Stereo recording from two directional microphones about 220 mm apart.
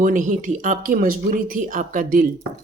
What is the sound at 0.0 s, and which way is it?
A woman's voice, 35° right (ahead or behind).